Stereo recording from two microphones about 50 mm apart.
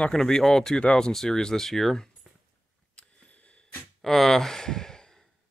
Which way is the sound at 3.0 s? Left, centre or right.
Left.